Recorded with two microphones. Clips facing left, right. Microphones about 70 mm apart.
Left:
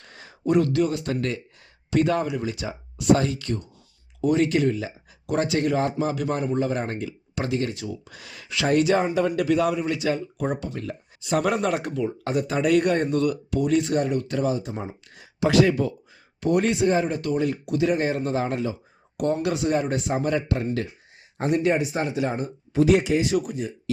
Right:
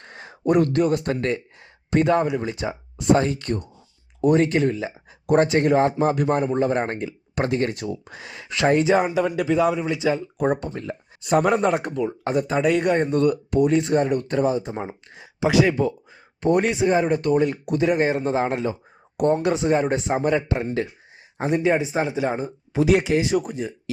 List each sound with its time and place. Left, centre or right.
0.0 s speech: right
8.1 s speech: right
8.7 s speech: right
10.3 s speech: right
11.3 s speech: right
13.1 s speech: right
16.6 s speech: centre
17.0 s speech: right
18.7 s speech: right; by 22.9 s centre
23.3 s speech: right